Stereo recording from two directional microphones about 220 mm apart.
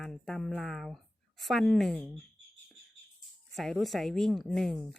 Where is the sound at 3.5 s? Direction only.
Centre (ahead or behind).